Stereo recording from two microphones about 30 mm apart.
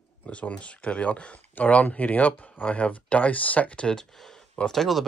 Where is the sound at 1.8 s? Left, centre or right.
Left.